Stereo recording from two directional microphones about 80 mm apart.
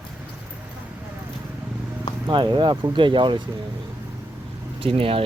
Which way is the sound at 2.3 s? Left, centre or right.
Right.